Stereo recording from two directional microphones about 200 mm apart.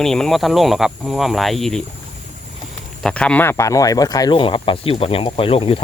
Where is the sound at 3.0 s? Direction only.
5° left (ahead or behind).